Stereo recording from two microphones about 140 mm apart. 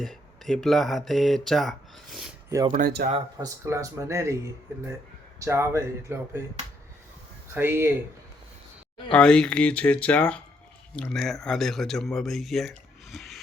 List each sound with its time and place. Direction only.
0.0 s speech: centre (ahead or behind)
2.7 s speech: 90° right
3.3 s speech: 25° right (ahead or behind)
7.5 s speech: 15° right (ahead or behind)
9.1 s speech: 5° left (ahead or behind)